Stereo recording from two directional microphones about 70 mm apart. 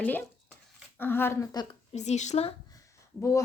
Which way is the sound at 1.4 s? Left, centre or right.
Left.